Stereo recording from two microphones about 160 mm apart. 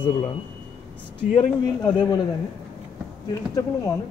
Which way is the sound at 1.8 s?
20° left (ahead or behind).